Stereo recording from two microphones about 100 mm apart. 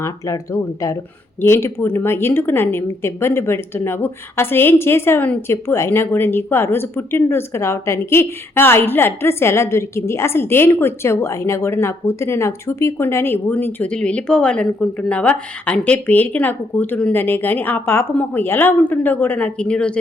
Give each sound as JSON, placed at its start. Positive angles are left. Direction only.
{"t": 0.0, "sound": "speech", "side_deg": 30}